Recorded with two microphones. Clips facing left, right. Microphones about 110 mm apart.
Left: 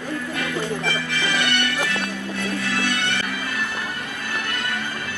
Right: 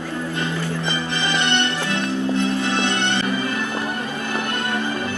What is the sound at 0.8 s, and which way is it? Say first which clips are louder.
Music: right 1 dB; 25° right (ahead or behind).